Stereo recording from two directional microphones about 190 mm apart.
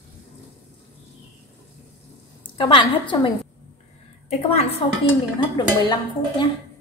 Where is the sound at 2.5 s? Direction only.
25° left (ahead or behind).